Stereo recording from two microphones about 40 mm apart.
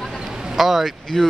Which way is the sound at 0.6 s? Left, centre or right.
Centre.